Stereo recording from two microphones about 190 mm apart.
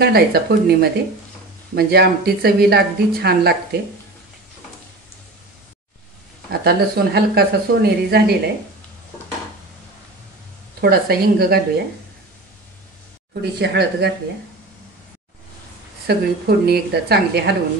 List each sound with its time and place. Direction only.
0.0 s speech: 55° right (ahead or behind)
6.5 s speech: 55° right (ahead or behind)
10.8 s speech: 55° right (ahead or behind)
13.3 s speech: 60° right (ahead or behind)
16.1 s speech: 55° right (ahead or behind)